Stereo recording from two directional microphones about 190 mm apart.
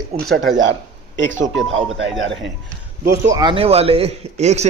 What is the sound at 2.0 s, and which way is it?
Speech, 70° right (ahead or behind).